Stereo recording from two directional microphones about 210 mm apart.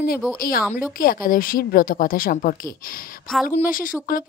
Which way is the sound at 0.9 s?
45° left (ahead or behind).